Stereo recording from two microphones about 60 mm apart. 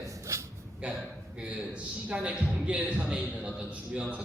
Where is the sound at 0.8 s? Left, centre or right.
Right.